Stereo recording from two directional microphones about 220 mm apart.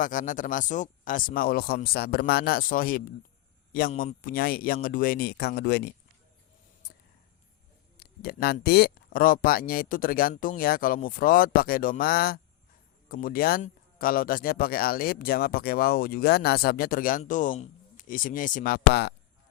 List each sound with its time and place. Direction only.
0.0 s speech: 35° left (ahead or behind)
7.9 s speech: 45° left (ahead or behind)